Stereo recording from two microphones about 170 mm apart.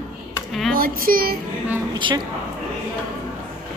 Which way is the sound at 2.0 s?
30° right (ahead or behind).